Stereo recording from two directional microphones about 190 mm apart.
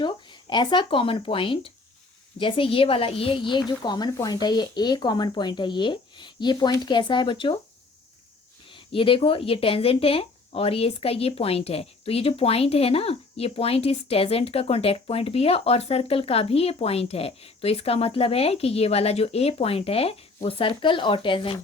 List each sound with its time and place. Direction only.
0.0 s speech: 25° left (ahead or behind)
8.7 s speech: 30° left (ahead or behind)